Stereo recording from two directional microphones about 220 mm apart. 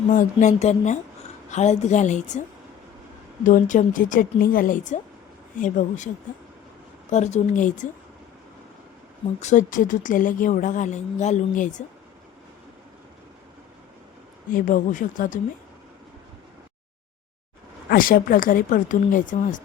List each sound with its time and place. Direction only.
0.1 s speech: 35° left (ahead or behind)
3.4 s speech: 35° left (ahead or behind)
7.1 s speech: 30° left (ahead or behind)
9.4 s speech: 35° left (ahead or behind)
14.5 s speech: 35° left (ahead or behind)
17.8 s speech: 40° left (ahead or behind)